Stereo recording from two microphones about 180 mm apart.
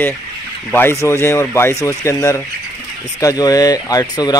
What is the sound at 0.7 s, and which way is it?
Speech, 10° left (ahead or behind).